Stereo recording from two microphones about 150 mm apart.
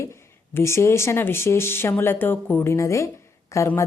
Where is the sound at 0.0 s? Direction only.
20° left (ahead or behind).